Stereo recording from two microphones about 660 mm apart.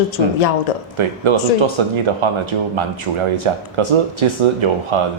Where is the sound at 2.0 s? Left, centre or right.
Right.